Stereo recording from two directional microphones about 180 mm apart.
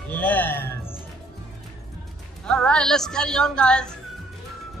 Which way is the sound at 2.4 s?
5° left (ahead or behind).